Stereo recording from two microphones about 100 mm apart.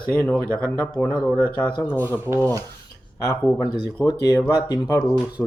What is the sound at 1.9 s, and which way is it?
Speech, 25° right (ahead or behind).